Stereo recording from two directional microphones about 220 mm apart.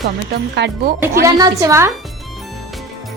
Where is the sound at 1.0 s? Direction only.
15° right (ahead or behind).